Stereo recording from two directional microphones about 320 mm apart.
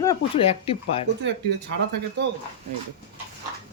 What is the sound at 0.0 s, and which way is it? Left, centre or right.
Speech, centre.